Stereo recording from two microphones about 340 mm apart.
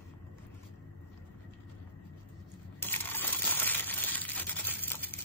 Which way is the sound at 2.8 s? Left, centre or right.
Centre.